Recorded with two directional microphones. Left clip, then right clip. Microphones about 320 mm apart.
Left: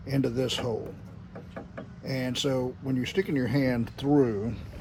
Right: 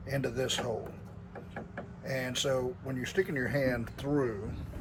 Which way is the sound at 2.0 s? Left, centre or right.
Centre.